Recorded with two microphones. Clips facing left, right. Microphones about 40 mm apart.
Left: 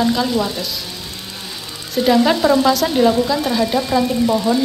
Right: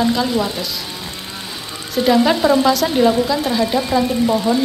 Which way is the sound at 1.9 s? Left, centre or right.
Centre.